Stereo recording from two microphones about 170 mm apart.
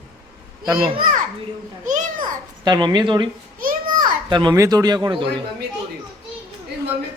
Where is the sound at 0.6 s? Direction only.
25° right (ahead or behind).